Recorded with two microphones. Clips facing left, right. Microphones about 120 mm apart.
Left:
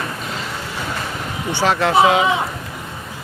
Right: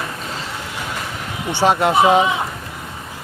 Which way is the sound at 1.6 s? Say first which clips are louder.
Right 1 dB; 20° right (ahead or behind).